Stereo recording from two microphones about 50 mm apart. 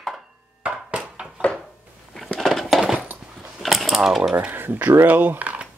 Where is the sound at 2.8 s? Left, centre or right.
Centre.